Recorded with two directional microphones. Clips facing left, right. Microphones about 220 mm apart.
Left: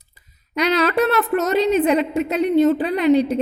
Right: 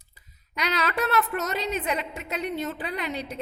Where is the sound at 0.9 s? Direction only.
65° left (ahead or behind).